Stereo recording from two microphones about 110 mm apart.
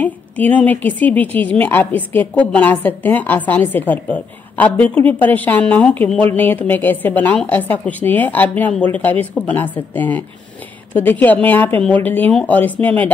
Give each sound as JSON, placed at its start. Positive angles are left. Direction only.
{"t": 0.0, "sound": "a woman's voice", "side_deg": 15}